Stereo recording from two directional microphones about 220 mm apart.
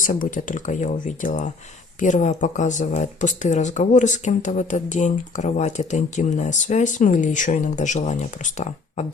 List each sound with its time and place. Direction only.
0.0 s speech: 35° left (ahead or behind)